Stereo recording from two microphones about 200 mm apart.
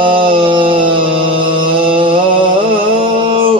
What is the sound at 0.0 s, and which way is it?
Music, 25° right (ahead or behind).